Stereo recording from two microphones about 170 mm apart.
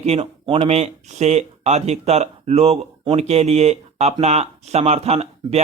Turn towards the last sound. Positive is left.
turn(degrees=-40)  # may be behind; listen again after turning